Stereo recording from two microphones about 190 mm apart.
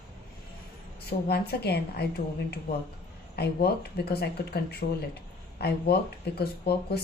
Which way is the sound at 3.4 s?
60° left (ahead or behind).